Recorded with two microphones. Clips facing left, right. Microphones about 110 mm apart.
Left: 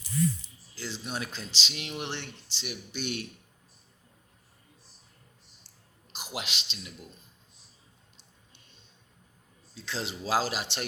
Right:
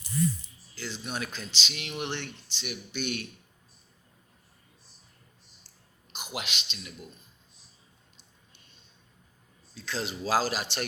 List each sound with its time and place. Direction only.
0.8 s speech: 30° left (ahead or behind)
6.1 s speech: 30° left (ahead or behind)
9.7 s speech: 25° left (ahead or behind)